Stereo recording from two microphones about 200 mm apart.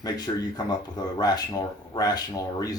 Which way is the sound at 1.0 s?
20° left (ahead or behind).